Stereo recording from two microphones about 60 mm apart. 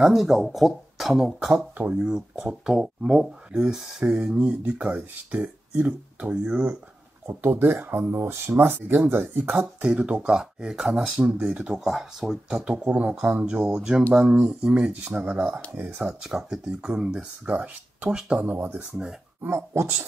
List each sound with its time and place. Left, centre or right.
0.0 s speech: centre
4.5 s speech: right
7.2 s speech: right
9.6 s speech: centre
11.6 s speech: centre
12.7 s speech: right
15.7 s speech: right
16.0 s speech: centre
18.5 s speech: right
18.8 s speech: centre
19.4 s speech: right